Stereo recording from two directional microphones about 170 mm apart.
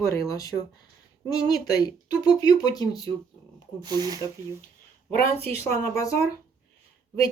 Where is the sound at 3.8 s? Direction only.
25° right (ahead or behind).